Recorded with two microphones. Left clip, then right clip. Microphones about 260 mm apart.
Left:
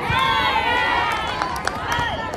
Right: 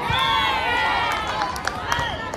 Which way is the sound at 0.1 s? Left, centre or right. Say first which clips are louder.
Left 2 dB; centre.